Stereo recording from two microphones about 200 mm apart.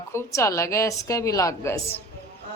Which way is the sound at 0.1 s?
15° left (ahead or behind).